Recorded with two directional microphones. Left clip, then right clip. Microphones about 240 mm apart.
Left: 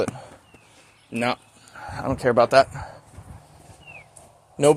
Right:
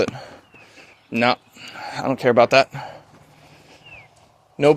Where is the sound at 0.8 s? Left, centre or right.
Right.